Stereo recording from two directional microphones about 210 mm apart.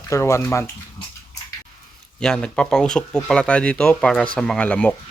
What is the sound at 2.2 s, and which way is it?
Speech, 5° left (ahead or behind).